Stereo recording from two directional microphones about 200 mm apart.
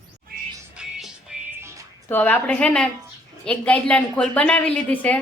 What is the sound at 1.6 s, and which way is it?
Music, 15° right (ahead or behind).